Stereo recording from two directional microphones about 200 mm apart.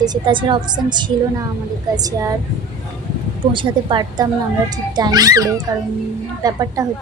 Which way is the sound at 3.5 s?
25° right (ahead or behind).